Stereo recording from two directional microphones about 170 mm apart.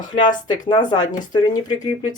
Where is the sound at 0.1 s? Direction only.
25° left (ahead or behind).